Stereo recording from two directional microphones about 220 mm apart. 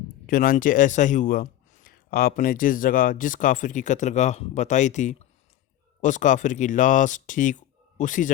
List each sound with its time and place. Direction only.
0.3 s speech: 40° left (ahead or behind)